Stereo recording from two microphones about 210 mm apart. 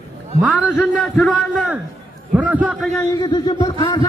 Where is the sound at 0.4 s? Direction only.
5° right (ahead or behind).